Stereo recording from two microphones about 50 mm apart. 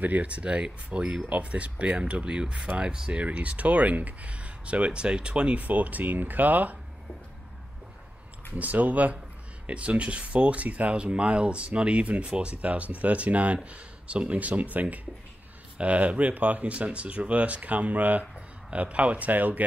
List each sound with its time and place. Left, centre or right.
0.0 s speech: right
8.5 s speech: right